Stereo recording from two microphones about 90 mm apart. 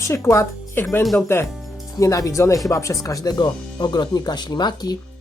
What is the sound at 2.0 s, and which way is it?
Speech, 40° left (ahead or behind).